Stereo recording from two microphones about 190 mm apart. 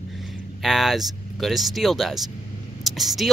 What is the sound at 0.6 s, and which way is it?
Speech, centre (ahead or behind).